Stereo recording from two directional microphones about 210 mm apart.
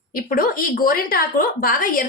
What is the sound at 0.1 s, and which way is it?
A woman's voice, 40° left (ahead or behind).